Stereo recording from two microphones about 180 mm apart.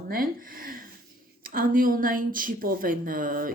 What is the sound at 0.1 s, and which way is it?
A woman's voice, 55° right (ahead or behind).